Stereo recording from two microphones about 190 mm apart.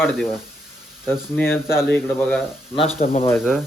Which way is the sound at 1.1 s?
10° left (ahead or behind).